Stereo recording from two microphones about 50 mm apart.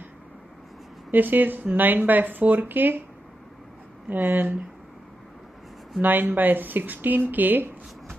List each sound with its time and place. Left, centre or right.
1.1 s speech: right
4.1 s speech: right
5.9 s speech: right